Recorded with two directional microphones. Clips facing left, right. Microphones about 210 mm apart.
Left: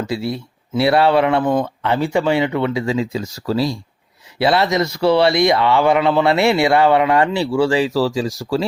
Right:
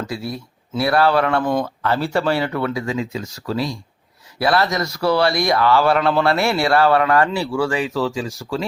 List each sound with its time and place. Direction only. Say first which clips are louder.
0.1 s speech: left 5 dB; 25° left (ahead or behind)
4.4 s speech: left 3 dB; 25° left (ahead or behind)